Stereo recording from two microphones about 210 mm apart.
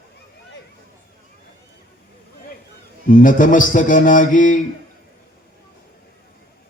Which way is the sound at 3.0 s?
40° left (ahead or behind).